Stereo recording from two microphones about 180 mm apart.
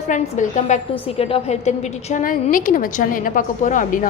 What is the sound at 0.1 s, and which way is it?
Speech, 45° left (ahead or behind).